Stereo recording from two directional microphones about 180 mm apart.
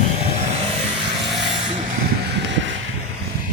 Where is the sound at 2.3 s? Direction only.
80° right.